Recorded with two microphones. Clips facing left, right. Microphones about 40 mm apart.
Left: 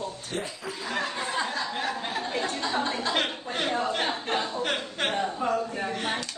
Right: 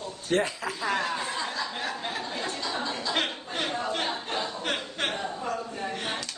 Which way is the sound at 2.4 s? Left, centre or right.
Left.